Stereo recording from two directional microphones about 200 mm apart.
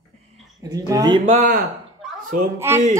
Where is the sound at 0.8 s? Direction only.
20° right (ahead or behind).